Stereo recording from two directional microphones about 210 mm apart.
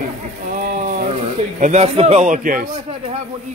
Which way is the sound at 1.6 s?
30° right (ahead or behind).